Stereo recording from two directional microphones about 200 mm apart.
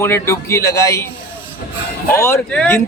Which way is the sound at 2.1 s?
15° left (ahead or behind).